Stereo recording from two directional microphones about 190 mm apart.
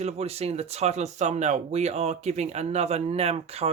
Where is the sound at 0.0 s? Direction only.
35° right (ahead or behind).